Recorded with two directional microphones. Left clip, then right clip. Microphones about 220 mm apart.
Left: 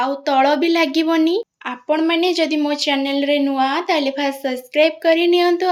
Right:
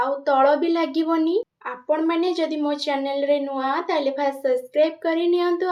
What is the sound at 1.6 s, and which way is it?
Speech, 50° left (ahead or behind).